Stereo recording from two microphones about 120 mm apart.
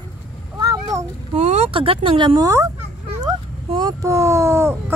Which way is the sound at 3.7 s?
40° right (ahead or behind).